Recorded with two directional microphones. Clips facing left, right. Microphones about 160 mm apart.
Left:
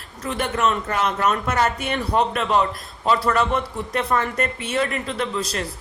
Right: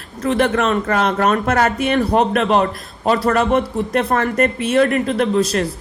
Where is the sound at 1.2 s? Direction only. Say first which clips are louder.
Right 3 dB; 65° right (ahead or behind).